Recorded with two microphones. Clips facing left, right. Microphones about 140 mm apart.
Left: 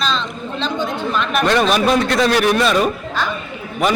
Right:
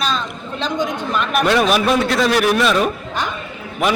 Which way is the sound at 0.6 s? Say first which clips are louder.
Right 1 dB; 10° right (ahead or behind).